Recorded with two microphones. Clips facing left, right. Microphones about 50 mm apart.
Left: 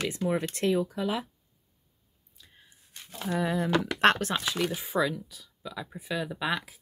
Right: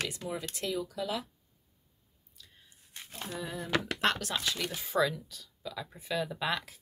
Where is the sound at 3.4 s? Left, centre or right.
Left.